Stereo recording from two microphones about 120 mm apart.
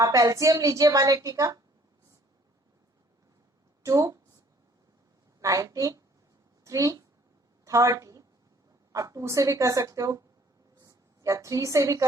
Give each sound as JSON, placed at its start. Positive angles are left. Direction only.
{"t": 0.0, "sound": "a woman's voice", "side_deg": -30}
{"t": 3.8, "sound": "a woman's voice", "side_deg": -30}
{"t": 5.4, "sound": "a woman's voice", "side_deg": -30}
{"t": 7.6, "sound": "a sound", "side_deg": -25}
{"t": 8.9, "sound": "a woman's voice", "side_deg": -30}
{"t": 10.8, "sound": "a sound", "side_deg": -30}